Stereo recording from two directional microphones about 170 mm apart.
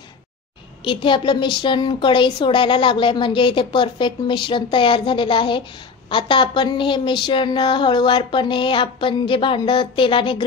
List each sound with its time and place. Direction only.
0.8 s a woman's voice: 30° left (ahead or behind)